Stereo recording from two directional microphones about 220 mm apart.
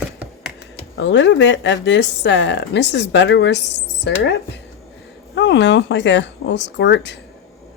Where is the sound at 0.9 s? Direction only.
55° left (ahead or behind).